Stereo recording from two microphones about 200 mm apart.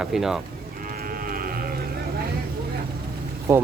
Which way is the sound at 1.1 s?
45° right (ahead or behind).